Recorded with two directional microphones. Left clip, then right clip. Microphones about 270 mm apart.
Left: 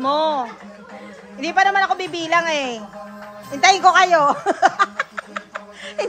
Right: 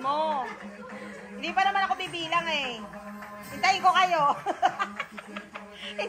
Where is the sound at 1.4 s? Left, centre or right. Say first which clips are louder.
Left 9 dB; left.